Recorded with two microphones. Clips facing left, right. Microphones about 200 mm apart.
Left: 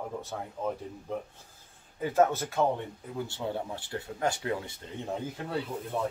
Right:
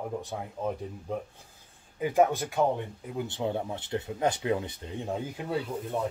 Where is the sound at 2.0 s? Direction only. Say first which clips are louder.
Right 1 dB; 15° right (ahead or behind).